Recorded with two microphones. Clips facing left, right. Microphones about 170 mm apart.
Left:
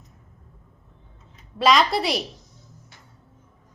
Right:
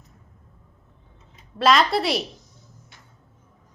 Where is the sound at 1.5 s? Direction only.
Centre (ahead or behind).